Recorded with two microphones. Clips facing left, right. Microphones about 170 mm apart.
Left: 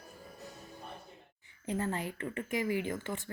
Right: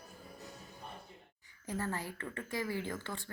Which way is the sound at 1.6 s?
20° left (ahead or behind).